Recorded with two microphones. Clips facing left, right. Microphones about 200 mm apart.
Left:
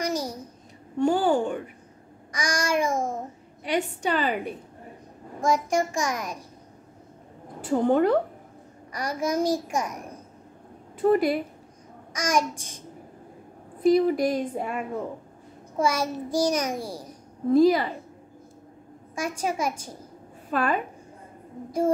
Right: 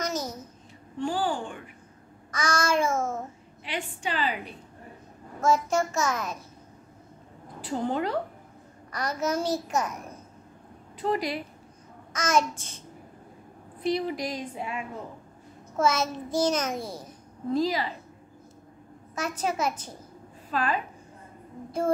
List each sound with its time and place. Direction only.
0.0 s a sound: 10° left (ahead or behind)
0.9 s a woman's voice: 45° left (ahead or behind)
2.3 s a child's voice: 15° left (ahead or behind)
3.6 s a woman's voice: 40° left (ahead or behind)
5.4 s a child's voice: 15° left (ahead or behind)
7.6 s a woman's voice: 50° left (ahead or behind)
8.9 s a child's voice: 10° left (ahead or behind)
11.0 s a woman's voice: 50° left (ahead or behind)
12.1 s a child's voice: 10° left (ahead or behind)
13.8 s a woman's voice: 50° left (ahead or behind)
15.7 s a child's voice: 10° left (ahead or behind)
17.5 s a woman's voice: 50° left (ahead or behind)
19.1 s a child's voice: 10° left (ahead or behind)
20.5 s a woman's voice: 50° left (ahead or behind)